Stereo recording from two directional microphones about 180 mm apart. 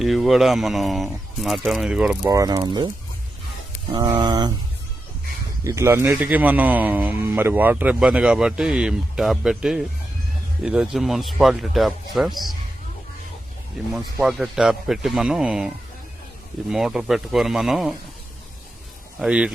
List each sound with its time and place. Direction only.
0.0 s speech: centre (ahead or behind)
2.2 s speech: 20° right (ahead or behind)
3.9 s speech: 25° right (ahead or behind)
5.6 s a man's voice: 15° right (ahead or behind)
13.9 s speech: 5° right (ahead or behind)
19.2 s a man's voice: 5° right (ahead or behind)